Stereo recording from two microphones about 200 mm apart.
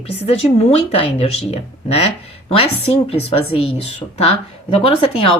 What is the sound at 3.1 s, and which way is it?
Speech, 30° left (ahead or behind).